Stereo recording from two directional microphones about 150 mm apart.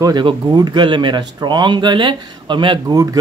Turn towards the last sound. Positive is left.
turn(degrees=-25)  # may be behind; listen again after turning